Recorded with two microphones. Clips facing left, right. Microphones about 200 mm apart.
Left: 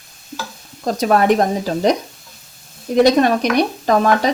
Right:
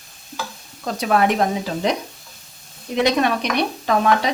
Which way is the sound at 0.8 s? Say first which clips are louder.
Left 4 dB; 40° left (ahead or behind).